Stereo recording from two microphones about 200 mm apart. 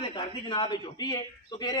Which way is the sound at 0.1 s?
25° left (ahead or behind).